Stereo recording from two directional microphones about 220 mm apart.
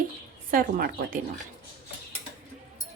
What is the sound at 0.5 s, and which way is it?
Speech, 40° right (ahead or behind).